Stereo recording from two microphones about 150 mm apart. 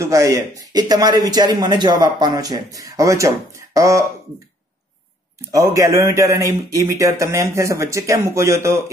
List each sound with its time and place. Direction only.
0.0 s speech: 20° right (ahead or behind)
5.5 s speech: 20° right (ahead or behind)